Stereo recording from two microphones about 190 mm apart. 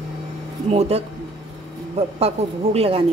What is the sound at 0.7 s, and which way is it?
A woman's voice, 35° right (ahead or behind).